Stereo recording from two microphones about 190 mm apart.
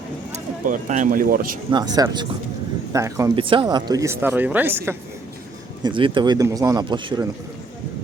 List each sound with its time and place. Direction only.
0.3 s speech: 40° right (ahead or behind)
1.7 s a man's voice: 20° right (ahead or behind)
5.8 s a man's voice: 25° right (ahead or behind)